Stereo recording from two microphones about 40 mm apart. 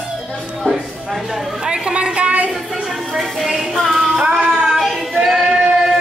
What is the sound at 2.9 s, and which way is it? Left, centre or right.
Music, centre.